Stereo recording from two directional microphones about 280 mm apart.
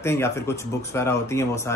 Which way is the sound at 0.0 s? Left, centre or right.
Centre.